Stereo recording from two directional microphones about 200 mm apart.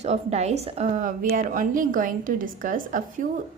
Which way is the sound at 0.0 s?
35° right (ahead or behind).